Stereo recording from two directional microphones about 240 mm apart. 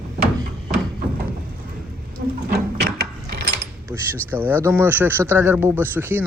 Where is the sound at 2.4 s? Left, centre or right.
Right.